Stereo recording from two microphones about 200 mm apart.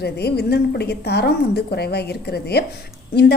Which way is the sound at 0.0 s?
55° left (ahead or behind).